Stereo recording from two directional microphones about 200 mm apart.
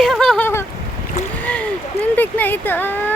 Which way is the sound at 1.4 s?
5° left (ahead or behind).